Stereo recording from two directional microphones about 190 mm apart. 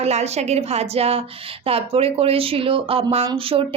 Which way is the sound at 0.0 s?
35° right (ahead or behind).